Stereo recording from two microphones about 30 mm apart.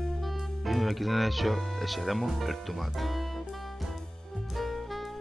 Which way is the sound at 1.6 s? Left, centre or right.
Centre.